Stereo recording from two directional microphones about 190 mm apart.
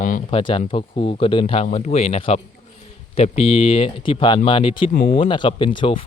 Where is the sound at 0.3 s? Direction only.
30° left (ahead or behind).